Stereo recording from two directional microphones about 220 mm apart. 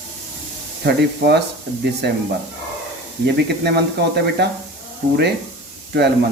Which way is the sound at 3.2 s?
50° right (ahead or behind).